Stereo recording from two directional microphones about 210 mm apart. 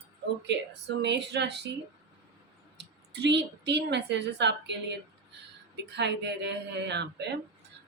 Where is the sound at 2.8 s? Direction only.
55° right (ahead or behind).